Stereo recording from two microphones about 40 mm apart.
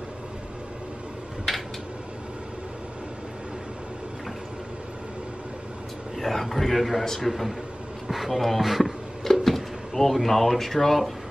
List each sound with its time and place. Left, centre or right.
6.1 s a man's voice: centre
9.2 s drawer open or close: centre